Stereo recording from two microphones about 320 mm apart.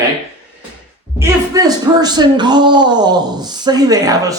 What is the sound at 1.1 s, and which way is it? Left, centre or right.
A man's voice, centre.